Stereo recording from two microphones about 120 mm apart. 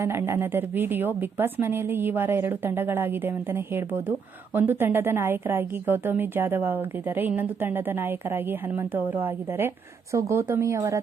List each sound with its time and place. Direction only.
0.0 s a woman's voice: 20° right (ahead or behind)